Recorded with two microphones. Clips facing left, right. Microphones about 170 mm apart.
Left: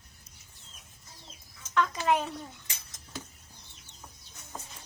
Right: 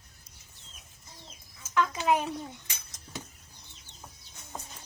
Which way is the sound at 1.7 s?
5° right (ahead or behind).